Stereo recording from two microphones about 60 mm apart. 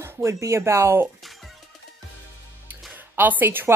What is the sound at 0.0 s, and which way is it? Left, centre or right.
Speech, right.